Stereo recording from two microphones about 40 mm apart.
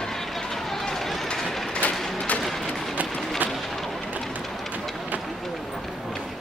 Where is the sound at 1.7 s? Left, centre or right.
Left.